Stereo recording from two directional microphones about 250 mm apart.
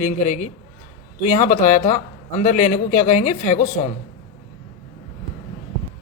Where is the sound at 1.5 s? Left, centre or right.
Left.